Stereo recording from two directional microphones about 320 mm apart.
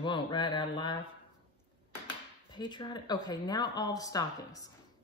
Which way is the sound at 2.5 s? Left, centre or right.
Centre.